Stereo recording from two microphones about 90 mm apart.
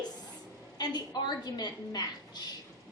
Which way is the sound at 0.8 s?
50° left (ahead or behind).